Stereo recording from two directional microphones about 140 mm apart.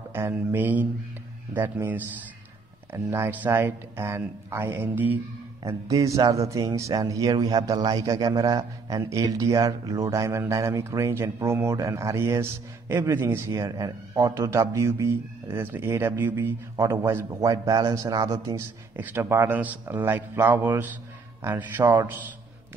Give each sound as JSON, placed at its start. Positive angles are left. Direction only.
{"t": 0.1, "sound": "a man's voice", "side_deg": -15}